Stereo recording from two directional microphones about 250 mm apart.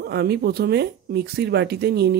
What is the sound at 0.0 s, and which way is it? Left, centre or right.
Speech, right.